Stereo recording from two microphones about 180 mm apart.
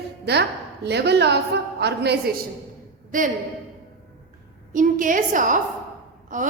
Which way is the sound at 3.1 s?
45° right (ahead or behind).